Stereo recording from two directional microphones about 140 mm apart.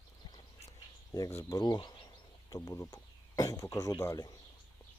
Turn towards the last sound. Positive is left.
turn(degrees=25)  # may be behind; listen again after turning